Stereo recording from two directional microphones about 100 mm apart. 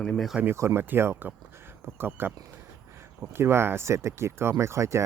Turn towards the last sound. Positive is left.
turn(degrees=-30)  # may be behind; listen again after turning